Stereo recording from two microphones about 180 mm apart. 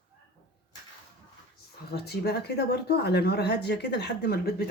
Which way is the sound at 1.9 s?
65° left (ahead or behind).